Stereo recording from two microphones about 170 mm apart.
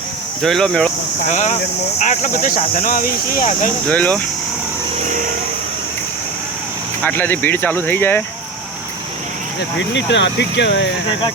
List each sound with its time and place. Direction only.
0.4 s speech: 5° left (ahead or behind)
1.3 s speech: 45° left (ahead or behind)
3.8 s speech: 10° left (ahead or behind)
7.0 s speech: 10° left (ahead or behind)
9.6 s speech: 90° left